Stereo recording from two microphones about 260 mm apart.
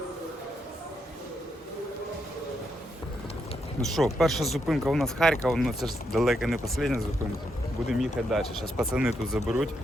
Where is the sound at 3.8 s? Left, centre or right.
Centre.